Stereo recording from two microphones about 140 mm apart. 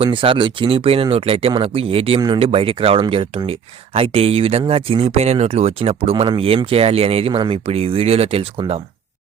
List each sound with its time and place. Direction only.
0.0 s speech: 40° right (ahead or behind)